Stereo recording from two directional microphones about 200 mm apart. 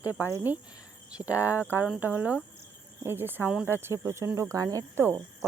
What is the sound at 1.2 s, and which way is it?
Cricket, 15° left (ahead or behind).